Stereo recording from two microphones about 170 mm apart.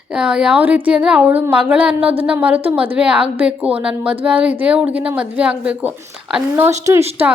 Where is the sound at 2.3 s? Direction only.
10° right (ahead or behind).